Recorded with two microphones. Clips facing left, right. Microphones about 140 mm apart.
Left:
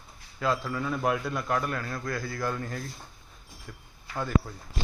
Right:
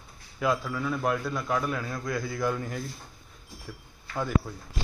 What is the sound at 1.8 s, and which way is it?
A man's voice, 15° right (ahead or behind).